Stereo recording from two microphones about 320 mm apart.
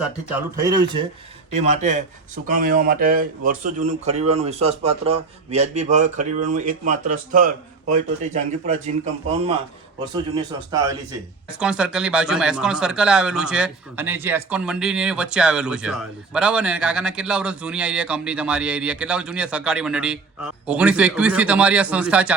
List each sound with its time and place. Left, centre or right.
0.0 s speech: centre; by 8.8 s right
10.3 s speech: centre